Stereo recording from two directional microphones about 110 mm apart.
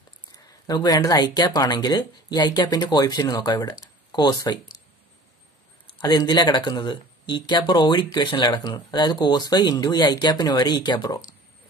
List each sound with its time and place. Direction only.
0.5 s speech: 35° left (ahead or behind)
5.9 s speech: 40° left (ahead or behind)